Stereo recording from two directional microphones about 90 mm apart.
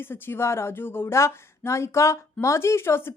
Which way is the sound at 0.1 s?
25° left (ahead or behind).